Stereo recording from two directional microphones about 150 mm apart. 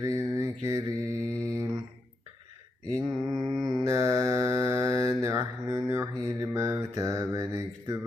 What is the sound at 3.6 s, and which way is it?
Mantra, 20° right (ahead or behind).